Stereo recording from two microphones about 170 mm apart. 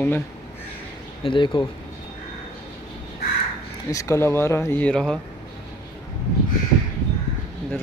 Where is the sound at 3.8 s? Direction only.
20° left (ahead or behind).